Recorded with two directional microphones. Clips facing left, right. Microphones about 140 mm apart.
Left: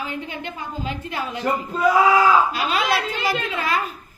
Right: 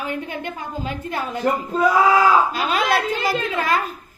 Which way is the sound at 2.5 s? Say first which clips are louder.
Right 2 dB; 45° right (ahead or behind).